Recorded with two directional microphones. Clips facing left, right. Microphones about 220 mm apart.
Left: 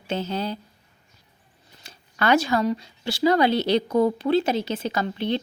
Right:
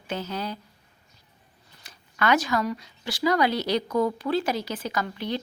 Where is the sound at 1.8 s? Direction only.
30° left (ahead or behind).